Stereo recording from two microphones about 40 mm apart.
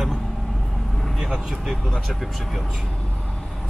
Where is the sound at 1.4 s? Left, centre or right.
Centre.